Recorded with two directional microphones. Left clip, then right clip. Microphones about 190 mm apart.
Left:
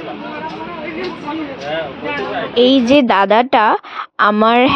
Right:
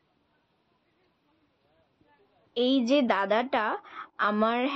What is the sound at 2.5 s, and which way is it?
A woman's voice, 50° left (ahead or behind).